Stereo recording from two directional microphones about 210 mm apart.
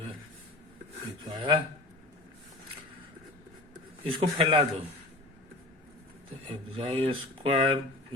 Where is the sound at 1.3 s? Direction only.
25° right (ahead or behind).